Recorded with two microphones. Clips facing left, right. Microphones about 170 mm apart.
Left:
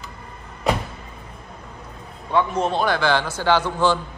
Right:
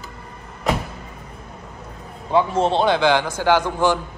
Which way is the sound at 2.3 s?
30° right (ahead or behind).